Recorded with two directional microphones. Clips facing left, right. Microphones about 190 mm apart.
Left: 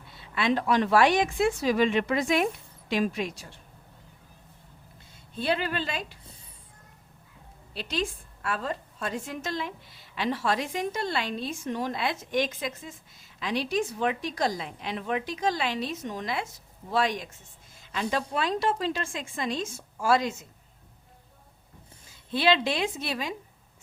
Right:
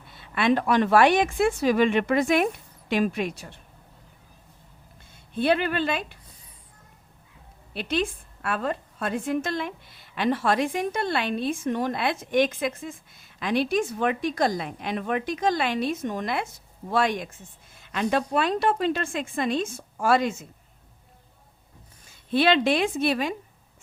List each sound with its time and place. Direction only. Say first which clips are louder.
0.2 s a woman's voice: right 4 dB; 60° right (ahead or behind)
5.3 s a woman's voice: right 5 dB; 60° right (ahead or behind)
7.7 s a woman's voice: right 4 dB; 60° right (ahead or behind)
22.3 s a woman's voice: right 4 dB; 60° right (ahead or behind)